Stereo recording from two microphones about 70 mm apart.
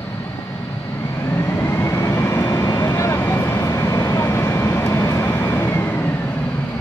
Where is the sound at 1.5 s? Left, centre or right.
Left.